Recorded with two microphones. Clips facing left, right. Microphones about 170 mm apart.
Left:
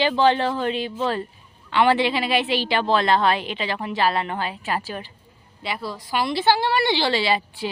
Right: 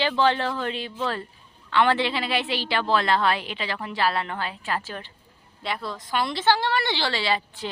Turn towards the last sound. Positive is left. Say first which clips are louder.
# left 4 dB
turn(degrees=10)  # may be behind; listen again after turning